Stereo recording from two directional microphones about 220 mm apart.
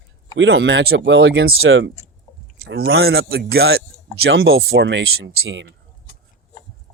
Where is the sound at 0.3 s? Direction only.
55° right (ahead or behind).